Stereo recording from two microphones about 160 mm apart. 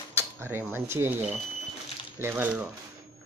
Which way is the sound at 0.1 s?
15° right (ahead or behind).